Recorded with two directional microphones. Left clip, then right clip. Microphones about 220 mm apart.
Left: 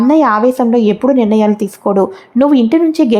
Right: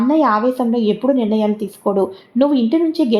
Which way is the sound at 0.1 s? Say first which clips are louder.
Left 5 dB; 25° left (ahead or behind).